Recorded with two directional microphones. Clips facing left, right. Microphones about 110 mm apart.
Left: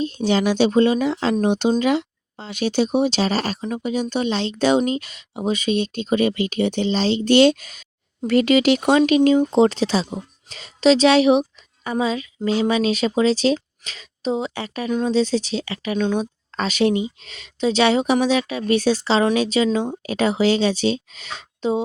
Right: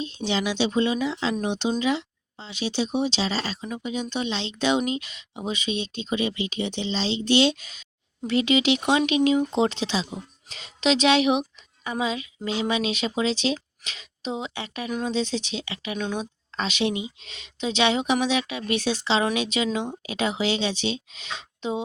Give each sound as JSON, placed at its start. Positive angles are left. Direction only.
{"t": 0.0, "sound": "a woman's voice", "side_deg": 45}
{"t": 16.6, "sound": "speech", "side_deg": 45}